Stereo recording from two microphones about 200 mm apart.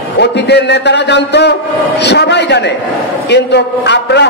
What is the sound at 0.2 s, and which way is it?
A man's voice, 60° left (ahead or behind).